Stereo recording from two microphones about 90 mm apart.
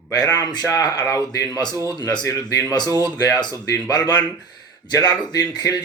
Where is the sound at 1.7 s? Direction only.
30° right (ahead or behind).